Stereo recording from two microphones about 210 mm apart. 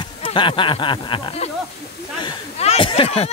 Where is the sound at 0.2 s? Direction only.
25° left (ahead or behind).